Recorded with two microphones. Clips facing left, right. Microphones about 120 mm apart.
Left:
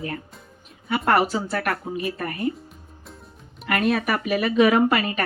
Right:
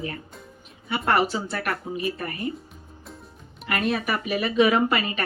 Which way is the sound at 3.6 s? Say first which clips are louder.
Left 3 dB; 50° left (ahead or behind).